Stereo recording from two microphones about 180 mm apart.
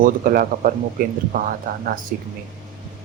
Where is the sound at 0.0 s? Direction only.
50° right (ahead or behind).